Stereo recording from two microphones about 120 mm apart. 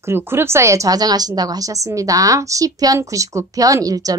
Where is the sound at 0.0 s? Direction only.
20° right (ahead or behind).